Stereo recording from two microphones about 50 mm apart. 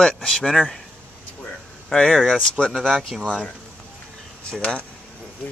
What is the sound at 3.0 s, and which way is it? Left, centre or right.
Speech, centre.